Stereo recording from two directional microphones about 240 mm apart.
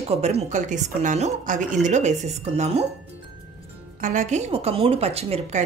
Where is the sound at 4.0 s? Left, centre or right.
Right.